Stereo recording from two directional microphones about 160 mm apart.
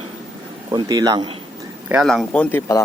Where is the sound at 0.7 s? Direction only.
25° right (ahead or behind).